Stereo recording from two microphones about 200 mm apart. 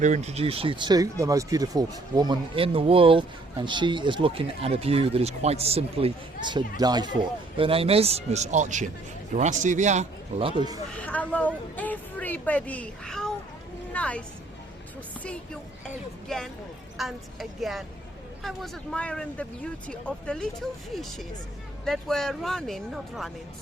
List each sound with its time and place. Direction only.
0.0 s a man's voice: 35° right (ahead or behind)
10.9 s speech: 5° left (ahead or behind)
16.3 s speech: centre (ahead or behind)